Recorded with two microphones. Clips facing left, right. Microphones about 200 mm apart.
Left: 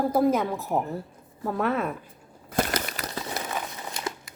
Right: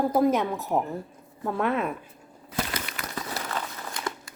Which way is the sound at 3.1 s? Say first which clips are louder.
Even; 20° left (ahead or behind).